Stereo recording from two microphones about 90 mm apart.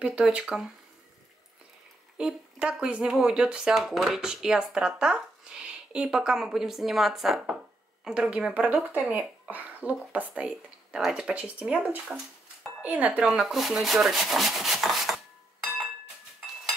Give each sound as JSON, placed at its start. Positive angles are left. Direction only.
{"t": 0.3, "sound": "speech", "side_deg": -10}
{"t": 2.1, "sound": "speech", "side_deg": -10}
{"t": 13.3, "sound": "rub", "side_deg": -5}